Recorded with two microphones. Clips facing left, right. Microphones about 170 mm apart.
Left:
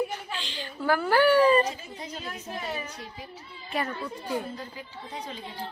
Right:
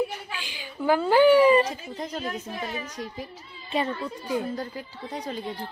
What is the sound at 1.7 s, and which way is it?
Speech, 50° right (ahead or behind).